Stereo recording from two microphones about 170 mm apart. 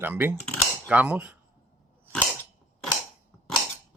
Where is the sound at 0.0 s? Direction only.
10° right (ahead or behind).